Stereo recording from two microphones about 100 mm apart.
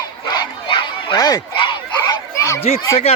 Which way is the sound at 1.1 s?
30° left (ahead or behind).